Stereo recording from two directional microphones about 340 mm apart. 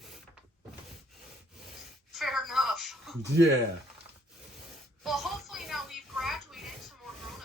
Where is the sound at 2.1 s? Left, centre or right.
Centre.